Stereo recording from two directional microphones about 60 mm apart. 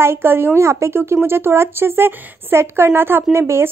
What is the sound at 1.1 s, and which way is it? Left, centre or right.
Speech, right.